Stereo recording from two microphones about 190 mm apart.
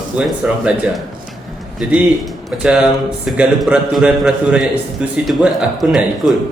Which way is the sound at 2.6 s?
5° right (ahead or behind).